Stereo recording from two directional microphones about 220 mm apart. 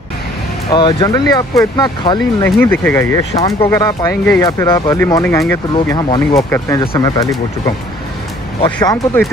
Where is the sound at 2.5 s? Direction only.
10° left (ahead or behind).